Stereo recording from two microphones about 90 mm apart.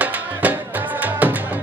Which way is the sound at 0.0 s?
15° right (ahead or behind).